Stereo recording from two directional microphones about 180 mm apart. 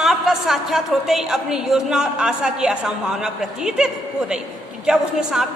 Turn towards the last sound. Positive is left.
turn(degrees=-5)  # may be behind; listen again after turning